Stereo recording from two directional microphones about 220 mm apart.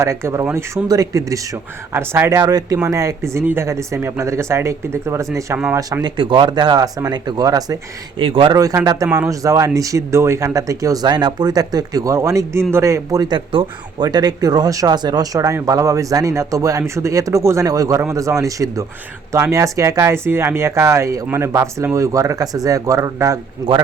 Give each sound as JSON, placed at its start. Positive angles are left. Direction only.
{"t": 0.0, "sound": "speech", "side_deg": -15}